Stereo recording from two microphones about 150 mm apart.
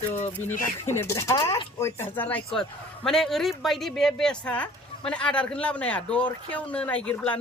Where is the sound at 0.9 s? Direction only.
15° left (ahead or behind).